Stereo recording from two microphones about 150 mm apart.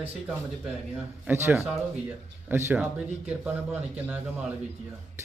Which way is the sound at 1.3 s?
15° right (ahead or behind).